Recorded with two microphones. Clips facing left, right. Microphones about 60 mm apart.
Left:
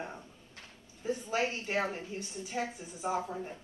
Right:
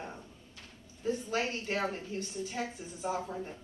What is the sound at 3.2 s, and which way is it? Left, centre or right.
Speech, centre.